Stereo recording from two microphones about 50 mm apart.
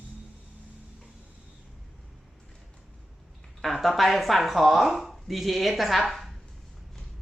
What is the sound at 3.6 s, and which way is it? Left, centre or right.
Speech, centre.